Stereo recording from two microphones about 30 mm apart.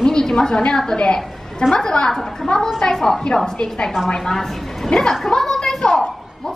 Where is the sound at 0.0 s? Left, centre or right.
Left.